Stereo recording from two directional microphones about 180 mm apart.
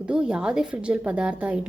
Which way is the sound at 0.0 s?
5° right (ahead or behind).